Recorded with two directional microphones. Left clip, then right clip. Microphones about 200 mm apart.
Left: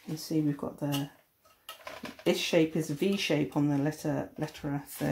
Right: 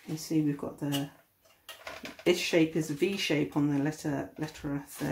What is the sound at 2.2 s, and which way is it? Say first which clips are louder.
Speech: even; 25° left (ahead or behind).